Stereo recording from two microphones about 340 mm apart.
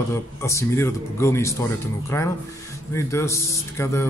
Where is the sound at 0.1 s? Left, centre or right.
Centre.